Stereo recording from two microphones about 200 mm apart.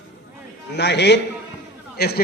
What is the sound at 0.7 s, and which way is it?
Speech, 60° left (ahead or behind).